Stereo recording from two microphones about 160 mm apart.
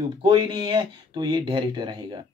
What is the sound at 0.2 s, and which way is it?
Speech, 30° right (ahead or behind).